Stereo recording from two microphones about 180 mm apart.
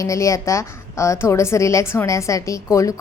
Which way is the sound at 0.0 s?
15° left (ahead or behind).